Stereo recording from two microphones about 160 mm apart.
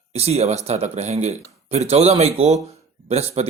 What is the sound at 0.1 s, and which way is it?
A man's voice, 40° right (ahead or behind).